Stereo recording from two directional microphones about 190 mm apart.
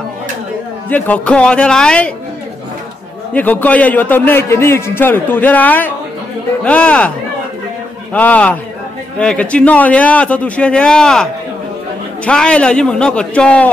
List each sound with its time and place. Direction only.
0.8 s a man's voice: 10° left (ahead or behind)
3.3 s a man's voice: 10° left (ahead or behind)
8.1 s a man's voice: 10° left (ahead or behind)
12.3 s a man's voice: 5° left (ahead or behind)